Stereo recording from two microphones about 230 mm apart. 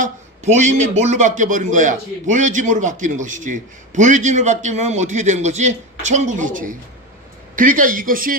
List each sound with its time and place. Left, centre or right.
0.0 s a man's voice: right